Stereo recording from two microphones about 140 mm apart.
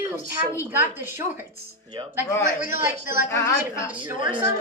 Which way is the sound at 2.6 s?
20° right (ahead or behind).